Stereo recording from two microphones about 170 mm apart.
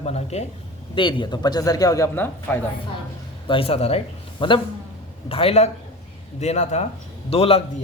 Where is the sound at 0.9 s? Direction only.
30° left (ahead or behind); by 2.6 s 10° left (ahead or behind).